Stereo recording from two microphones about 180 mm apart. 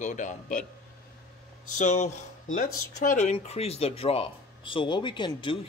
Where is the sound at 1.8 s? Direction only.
40° left (ahead or behind).